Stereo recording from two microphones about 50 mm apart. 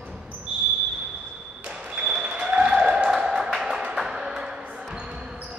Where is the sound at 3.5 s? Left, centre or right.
Centre.